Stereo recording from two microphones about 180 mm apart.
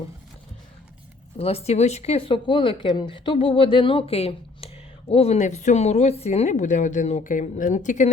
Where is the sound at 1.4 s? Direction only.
35° left (ahead or behind).